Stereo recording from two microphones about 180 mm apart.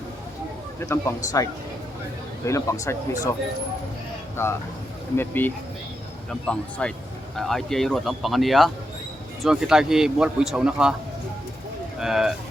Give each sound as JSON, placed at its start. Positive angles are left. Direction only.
{"t": 0.8, "sound": "speech", "side_deg": 15}
{"t": 4.4, "sound": "a man's voice", "side_deg": 15}
{"t": 11.9, "sound": "a man's voice", "side_deg": 0}